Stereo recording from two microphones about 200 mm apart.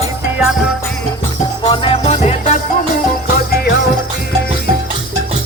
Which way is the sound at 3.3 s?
55° left (ahead or behind).